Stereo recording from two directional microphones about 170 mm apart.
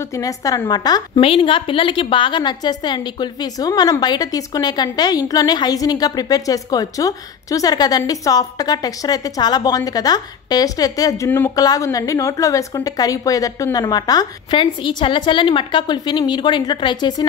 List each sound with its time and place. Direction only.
0.1 s a woman's voice: 20° left (ahead or behind)